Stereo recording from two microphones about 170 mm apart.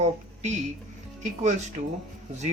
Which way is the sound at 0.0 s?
40° right (ahead or behind).